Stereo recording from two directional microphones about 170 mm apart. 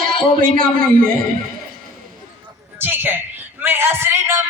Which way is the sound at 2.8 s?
10° right (ahead or behind).